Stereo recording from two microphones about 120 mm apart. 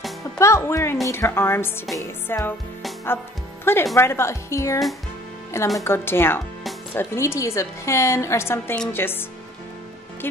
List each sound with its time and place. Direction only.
0.4 s a woman's voice: 25° left (ahead or behind)
3.6 s a woman's voice: 20° left (ahead or behind)
10.2 s speech: 15° left (ahead or behind)